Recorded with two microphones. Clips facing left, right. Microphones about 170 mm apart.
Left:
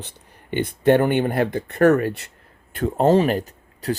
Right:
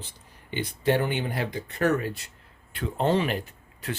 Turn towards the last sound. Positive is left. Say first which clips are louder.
# left 9 dB
turn(degrees=40)  # may be behind; listen again after turning